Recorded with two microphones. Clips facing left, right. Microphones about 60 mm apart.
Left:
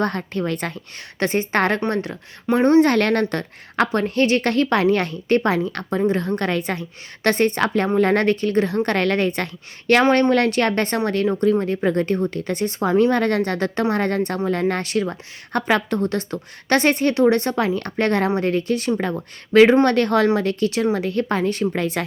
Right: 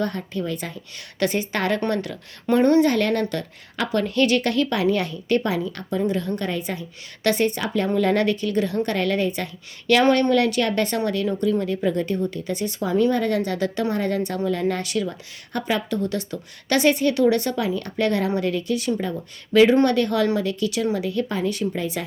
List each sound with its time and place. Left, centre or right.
0.0 s a woman's voice: left
1.2 s speech: left
1.9 s speech: left
2.8 s speech: left
7.3 s speech: left
10.0 s speech: left